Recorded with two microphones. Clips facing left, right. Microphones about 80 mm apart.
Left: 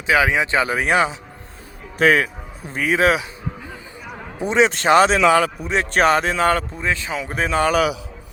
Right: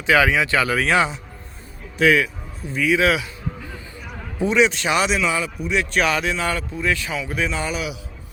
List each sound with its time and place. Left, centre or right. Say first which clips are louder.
0.1 s speech: even; centre
2.0 s a man's voice: left 1 dB; left
4.5 s speech: left 5 dB; left
5.2 s speech: left 8 dB; left
5.6 s speech: left 3 dB; left
6.8 s speech: right 4 dB; left
7.2 s a man's voice: left 4 dB; left